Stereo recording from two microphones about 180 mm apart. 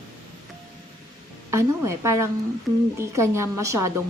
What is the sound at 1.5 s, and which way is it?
A woman's voice, 15° right (ahead or behind).